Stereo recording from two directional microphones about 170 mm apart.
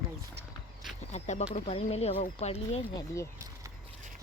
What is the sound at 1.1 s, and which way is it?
Speech, 40° left (ahead or behind).